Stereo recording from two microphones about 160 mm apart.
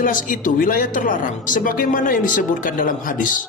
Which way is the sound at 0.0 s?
60° left (ahead or behind).